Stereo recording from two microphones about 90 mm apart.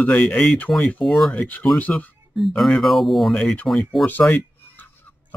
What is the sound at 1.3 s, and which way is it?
Speech, 15° left (ahead or behind).